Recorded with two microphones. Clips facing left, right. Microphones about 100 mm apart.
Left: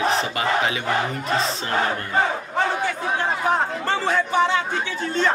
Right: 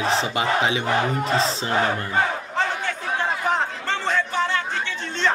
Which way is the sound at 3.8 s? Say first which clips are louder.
Left 2 dB; 10° left (ahead or behind).